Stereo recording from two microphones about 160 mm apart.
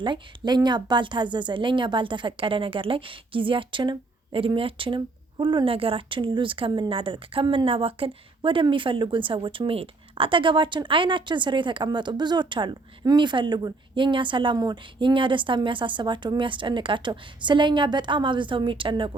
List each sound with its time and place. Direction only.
0.0 s a woman's voice: 30° right (ahead or behind)